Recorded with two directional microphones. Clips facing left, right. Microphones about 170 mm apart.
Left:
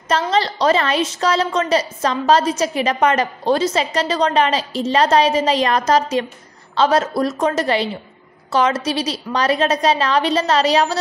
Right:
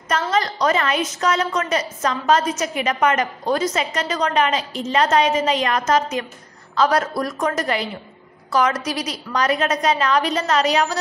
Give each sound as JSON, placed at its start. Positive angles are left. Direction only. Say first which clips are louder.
{"t": 0.3, "sound": "a woman's voice", "louder": "left 3 dB", "side_deg": 30}